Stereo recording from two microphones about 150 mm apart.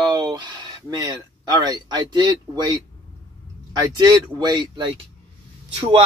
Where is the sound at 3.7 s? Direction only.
30° right (ahead or behind).